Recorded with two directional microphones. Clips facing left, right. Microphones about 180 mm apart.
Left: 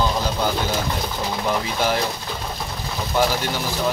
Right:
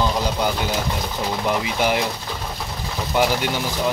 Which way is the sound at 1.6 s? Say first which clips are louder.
Right 1 dB; 15° right (ahead or behind).